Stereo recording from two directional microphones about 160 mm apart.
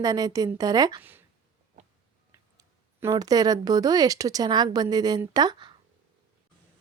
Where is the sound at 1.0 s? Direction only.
10° right (ahead or behind).